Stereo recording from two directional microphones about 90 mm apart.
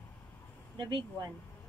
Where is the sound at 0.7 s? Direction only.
60° right (ahead or behind).